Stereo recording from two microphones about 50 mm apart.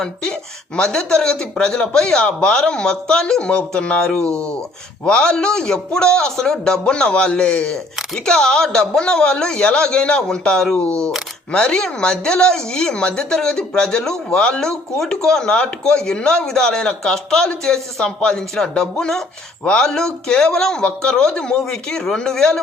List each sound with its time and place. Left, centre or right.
0.0 s speech: centre